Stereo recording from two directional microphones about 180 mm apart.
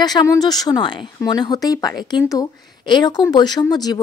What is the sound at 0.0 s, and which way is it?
Speech, 20° left (ahead or behind).